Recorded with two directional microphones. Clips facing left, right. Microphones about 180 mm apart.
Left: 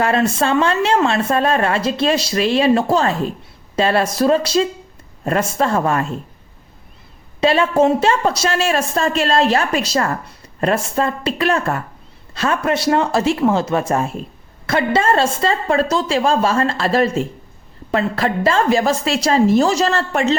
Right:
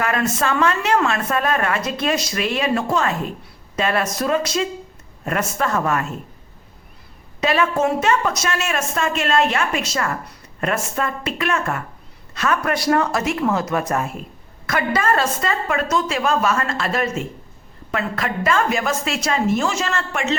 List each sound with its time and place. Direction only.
0.0 s a woman's voice: 30° left (ahead or behind)
7.4 s a woman's voice: 30° left (ahead or behind)